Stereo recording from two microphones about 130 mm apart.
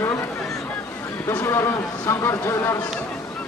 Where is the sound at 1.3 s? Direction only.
20° left (ahead or behind).